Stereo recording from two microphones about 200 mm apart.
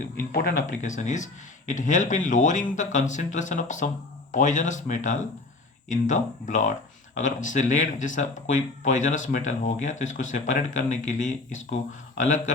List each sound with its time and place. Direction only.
0.3 s speech: 50° left (ahead or behind)